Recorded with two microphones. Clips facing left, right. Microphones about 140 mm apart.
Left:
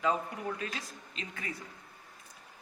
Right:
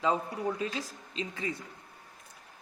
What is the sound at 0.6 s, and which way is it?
Speech, 30° right (ahead or behind).